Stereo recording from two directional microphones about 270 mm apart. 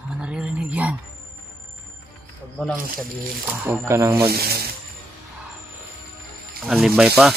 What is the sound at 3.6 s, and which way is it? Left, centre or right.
Speech, centre.